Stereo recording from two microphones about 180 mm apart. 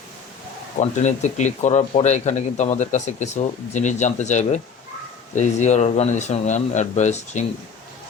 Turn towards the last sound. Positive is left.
turn(degrees=40)  # may be behind; listen again after turning